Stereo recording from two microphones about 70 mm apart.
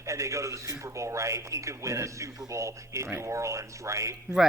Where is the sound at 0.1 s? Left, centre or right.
Right.